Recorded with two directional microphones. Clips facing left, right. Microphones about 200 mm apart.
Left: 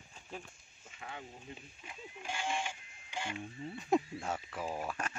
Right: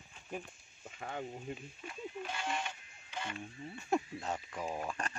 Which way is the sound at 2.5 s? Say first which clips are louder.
Left 3 dB; 25° left (ahead or behind).